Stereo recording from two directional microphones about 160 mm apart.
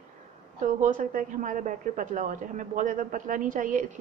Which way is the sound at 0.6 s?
55° right (ahead or behind).